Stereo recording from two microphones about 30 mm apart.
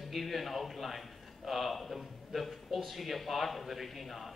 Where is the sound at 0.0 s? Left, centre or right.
Centre.